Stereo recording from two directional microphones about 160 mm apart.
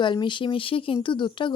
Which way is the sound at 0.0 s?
30° left (ahead or behind).